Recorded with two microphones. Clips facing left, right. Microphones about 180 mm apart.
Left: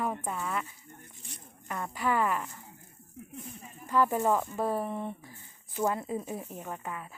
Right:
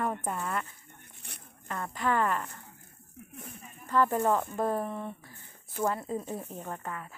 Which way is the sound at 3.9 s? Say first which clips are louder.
Even; 10° left (ahead or behind).